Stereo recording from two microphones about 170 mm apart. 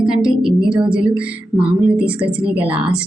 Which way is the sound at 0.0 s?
5° right (ahead or behind).